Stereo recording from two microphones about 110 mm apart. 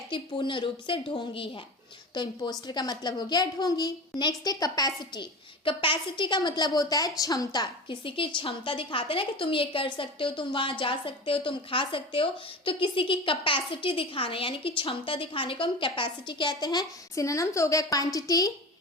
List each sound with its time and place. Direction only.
0.1 s a woman's voice: 50° left (ahead or behind)
8.0 s a woman's voice: 50° left (ahead or behind); by 18.5 s 30° left (ahead or behind)